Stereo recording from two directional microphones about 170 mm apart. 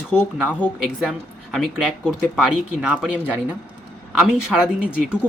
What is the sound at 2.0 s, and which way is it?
Speech, 5° right (ahead or behind).